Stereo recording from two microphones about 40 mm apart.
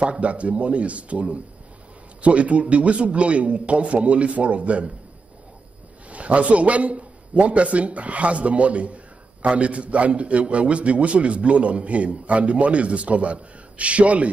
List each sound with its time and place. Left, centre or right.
0.0 s a man's voice: right
6.0 s a man's voice: right